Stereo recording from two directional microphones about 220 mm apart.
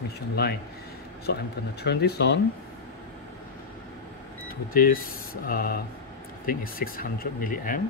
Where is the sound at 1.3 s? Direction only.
50° left (ahead or behind).